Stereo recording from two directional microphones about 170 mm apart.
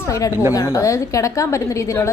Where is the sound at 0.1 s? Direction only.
20° left (ahead or behind).